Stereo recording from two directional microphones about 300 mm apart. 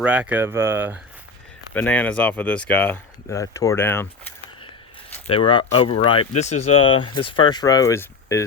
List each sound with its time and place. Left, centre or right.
0.0 s speech: centre
1.7 s speech: centre
5.2 s speech: centre